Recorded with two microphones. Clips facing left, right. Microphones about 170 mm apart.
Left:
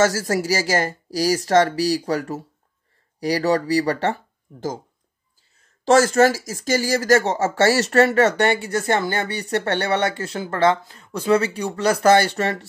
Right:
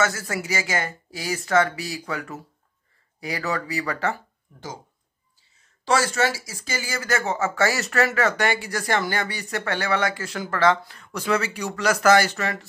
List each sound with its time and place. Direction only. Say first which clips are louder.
0.0 s speech: left 6 dB; 40° left (ahead or behind)
6.1 s speech: left 8 dB; 45° left (ahead or behind)